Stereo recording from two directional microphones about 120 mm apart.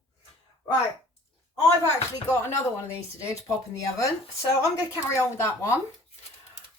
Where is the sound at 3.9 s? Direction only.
25° left (ahead or behind).